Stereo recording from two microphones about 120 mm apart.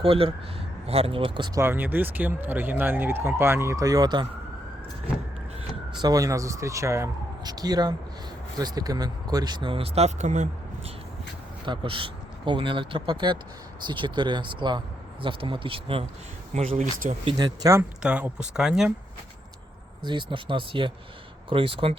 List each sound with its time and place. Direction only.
0.0 s speech: 50° right (ahead or behind)
1.5 s speech: 20° right (ahead or behind); by 4.3 s 35° right (ahead or behind)
6.0 s speech: 30° right (ahead or behind); by 10.9 s 90° right
11.6 s speech: 40° right (ahead or behind)
16.6 s speech: 90° right
17.3 s speech: 30° right (ahead or behind)
18.0 s speech: 10° right (ahead or behind)
20.1 s speech: 40° right (ahead or behind)